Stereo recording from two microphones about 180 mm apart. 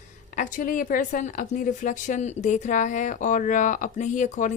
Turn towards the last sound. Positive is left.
turn(degrees=40)  # may be behind; listen again after turning